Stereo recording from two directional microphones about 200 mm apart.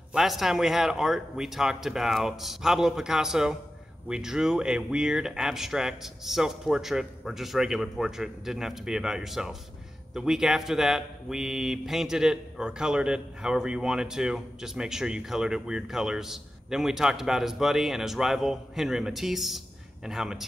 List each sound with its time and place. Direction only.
0.1 s speech: centre (ahead or behind)